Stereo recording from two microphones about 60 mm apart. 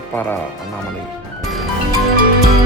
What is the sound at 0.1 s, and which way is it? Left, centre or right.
Speech, left.